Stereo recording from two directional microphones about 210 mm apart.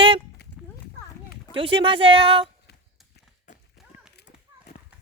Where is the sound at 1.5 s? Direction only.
25° right (ahead or behind).